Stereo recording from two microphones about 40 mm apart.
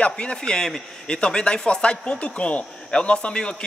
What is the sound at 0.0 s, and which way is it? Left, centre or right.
Speech, left.